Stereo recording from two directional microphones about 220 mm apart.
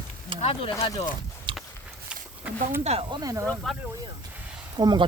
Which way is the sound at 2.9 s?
25° right (ahead or behind).